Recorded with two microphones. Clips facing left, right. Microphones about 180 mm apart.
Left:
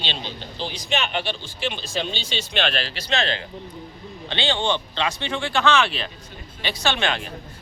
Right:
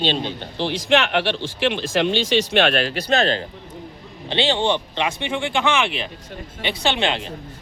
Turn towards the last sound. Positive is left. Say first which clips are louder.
# right 2 dB
turn(degrees=-20)  # may be behind; listen again after turning